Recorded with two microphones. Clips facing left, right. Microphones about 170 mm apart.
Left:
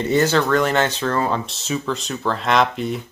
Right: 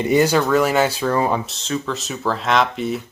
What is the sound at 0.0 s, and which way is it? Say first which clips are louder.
Speech: right 2 dB; 10° right (ahead or behind).